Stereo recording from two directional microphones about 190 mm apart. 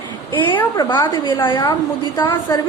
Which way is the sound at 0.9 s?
25° left (ahead or behind).